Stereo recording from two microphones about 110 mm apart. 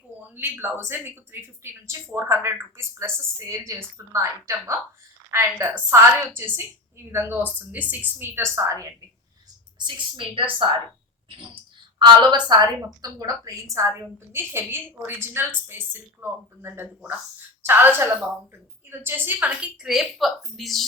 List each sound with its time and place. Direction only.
0.3 s speech: 20° right (ahead or behind)
9.7 s a woman's voice: 45° right (ahead or behind)
11.9 s a woman's voice: 40° right (ahead or behind)
14.3 s a woman's voice: 20° right (ahead or behind); by 20.8 s centre (ahead or behind)